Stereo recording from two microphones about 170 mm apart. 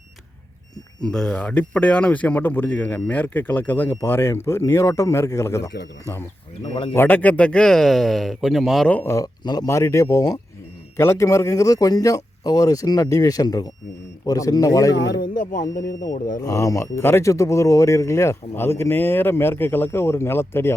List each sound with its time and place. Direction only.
1.0 s speech: 5° left (ahead or behind)
6.9 s speech: 10° left (ahead or behind)
14.9 s speech: 80° left
15.9 s speech: 50° left (ahead or behind)
16.4 s speech: 20° left (ahead or behind)